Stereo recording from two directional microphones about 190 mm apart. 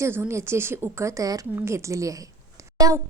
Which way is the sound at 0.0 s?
15° right (ahead or behind).